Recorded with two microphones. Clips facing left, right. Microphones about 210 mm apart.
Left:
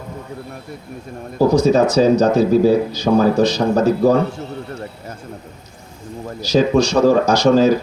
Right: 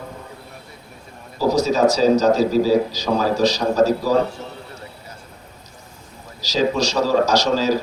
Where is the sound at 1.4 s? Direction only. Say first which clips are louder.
Left 4 dB; 55° left (ahead or behind).